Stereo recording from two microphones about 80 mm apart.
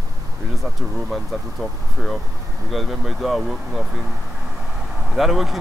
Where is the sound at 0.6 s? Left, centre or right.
Centre.